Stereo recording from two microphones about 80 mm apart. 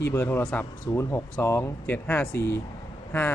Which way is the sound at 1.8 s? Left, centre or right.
Left.